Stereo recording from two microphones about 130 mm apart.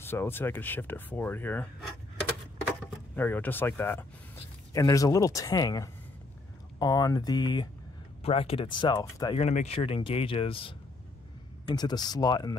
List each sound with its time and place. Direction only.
0.0 s speech: 15° left (ahead or behind)
3.2 s speech: 15° left (ahead or behind); by 7.7 s 30° left (ahead or behind)
8.2 s speech: 50° left (ahead or behind); by 9.4 s 30° left (ahead or behind)
9.4 s speech: 60° left (ahead or behind)
11.6 s speech: 30° left (ahead or behind)